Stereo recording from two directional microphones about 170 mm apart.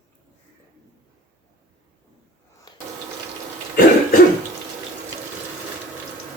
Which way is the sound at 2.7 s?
25° left (ahead or behind).